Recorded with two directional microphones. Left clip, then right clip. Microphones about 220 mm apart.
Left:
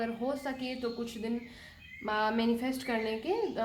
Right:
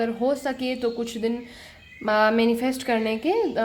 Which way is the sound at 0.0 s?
40° right (ahead or behind).